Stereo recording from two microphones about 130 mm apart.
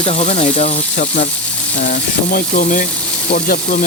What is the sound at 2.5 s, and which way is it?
Speech, 90° left.